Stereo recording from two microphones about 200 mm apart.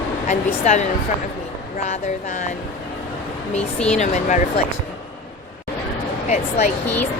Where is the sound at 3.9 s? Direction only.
35° left (ahead or behind).